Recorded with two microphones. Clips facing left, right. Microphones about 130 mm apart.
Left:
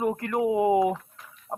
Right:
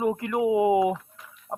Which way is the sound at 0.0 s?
5° right (ahead or behind).